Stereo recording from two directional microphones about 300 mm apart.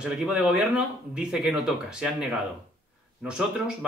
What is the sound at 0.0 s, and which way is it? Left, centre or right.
Speech, centre.